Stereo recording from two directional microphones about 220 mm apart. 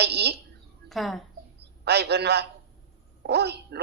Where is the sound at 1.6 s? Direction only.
50° right (ahead or behind).